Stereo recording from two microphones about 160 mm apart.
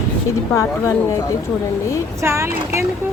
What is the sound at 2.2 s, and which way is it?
Speech, 15° right (ahead or behind).